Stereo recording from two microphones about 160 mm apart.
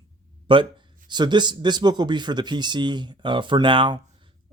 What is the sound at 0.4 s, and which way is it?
Speech, 30° right (ahead or behind).